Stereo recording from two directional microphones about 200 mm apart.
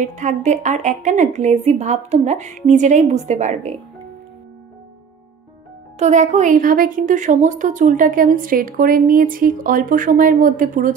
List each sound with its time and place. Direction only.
0.0 s a woman's voice: 35° right (ahead or behind)
5.9 s a woman's voice: 35° right (ahead or behind)